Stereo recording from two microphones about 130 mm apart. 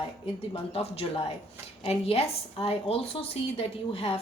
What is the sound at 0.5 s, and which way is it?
A woman's voice, 45° left (ahead or behind).